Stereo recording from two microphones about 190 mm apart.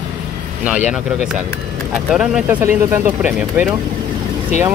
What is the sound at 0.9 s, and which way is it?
Speech, 5° right (ahead or behind).